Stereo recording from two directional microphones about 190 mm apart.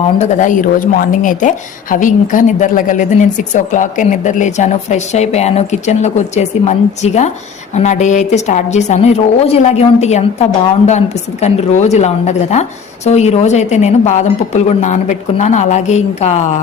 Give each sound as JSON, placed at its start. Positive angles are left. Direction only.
{"t": 0.2, "sound": "speech", "side_deg": 40}